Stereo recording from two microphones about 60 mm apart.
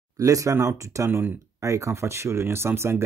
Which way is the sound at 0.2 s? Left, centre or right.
Right.